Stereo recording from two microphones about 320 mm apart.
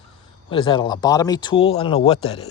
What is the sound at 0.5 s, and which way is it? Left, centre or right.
Speech, centre.